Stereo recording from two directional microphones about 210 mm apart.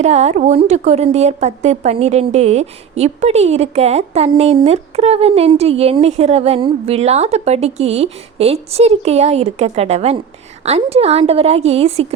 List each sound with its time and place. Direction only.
0.0 s a woman's voice: 30° right (ahead or behind)